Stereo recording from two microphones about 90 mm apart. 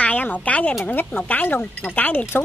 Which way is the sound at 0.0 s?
20° left (ahead or behind).